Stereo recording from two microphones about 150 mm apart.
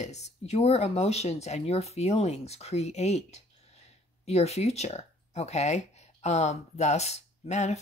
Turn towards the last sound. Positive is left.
turn(degrees=50)  # may be behind; listen again after turning